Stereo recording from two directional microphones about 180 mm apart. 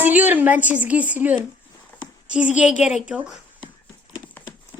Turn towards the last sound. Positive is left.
turn(degrees=-5)  # may be behind; listen again after turning